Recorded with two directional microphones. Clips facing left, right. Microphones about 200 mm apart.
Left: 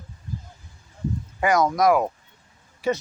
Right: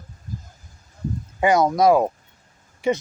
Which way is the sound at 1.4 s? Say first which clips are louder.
Right 3 dB; 30° right (ahead or behind).